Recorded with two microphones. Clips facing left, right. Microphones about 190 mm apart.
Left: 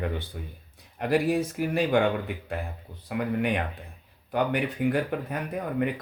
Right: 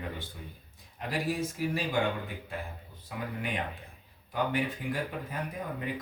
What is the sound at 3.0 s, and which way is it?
Speech, 65° left (ahead or behind).